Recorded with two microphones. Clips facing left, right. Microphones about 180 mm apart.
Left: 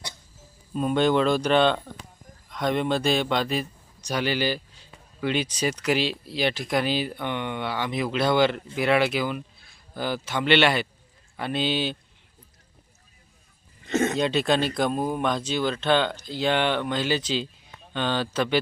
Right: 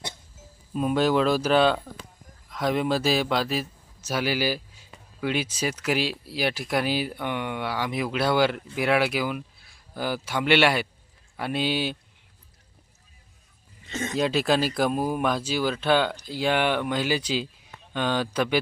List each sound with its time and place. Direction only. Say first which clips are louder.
0.7 s speech: left 1 dB; 5° right (ahead or behind)
13.8 s a sound: left 8 dB; 60° left (ahead or behind)
14.2 s speech: even; 5° right (ahead or behind)